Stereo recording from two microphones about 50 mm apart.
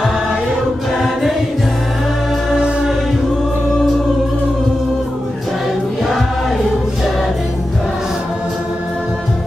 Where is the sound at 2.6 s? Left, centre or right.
Centre.